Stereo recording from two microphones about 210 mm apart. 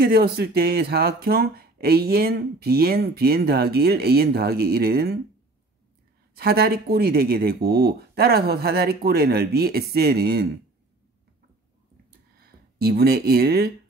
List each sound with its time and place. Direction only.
0.0 s speech: 50° right (ahead or behind)
6.3 s speech: 50° right (ahead or behind)
12.4 s speech: 45° right (ahead or behind)